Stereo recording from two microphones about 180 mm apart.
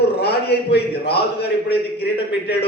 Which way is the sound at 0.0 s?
65° left (ahead or behind).